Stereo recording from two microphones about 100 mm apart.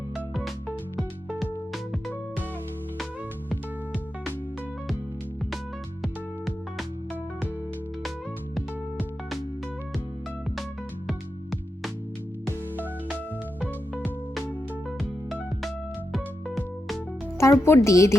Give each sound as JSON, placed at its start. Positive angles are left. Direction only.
{"t": 6.0, "sound": "music", "side_deg": 0}
{"t": 12.7, "sound": "music", "side_deg": -20}
{"t": 16.1, "sound": "music", "side_deg": 0}
{"t": 17.4, "sound": "speech", "side_deg": 25}